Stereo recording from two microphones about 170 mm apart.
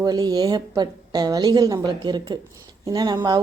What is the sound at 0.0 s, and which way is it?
A woman's voice, 25° right (ahead or behind).